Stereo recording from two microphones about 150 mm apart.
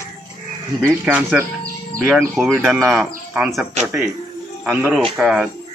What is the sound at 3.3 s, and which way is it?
Speech, 5° right (ahead or behind).